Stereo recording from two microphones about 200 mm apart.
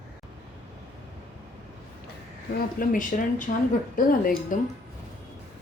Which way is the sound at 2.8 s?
40° left (ahead or behind).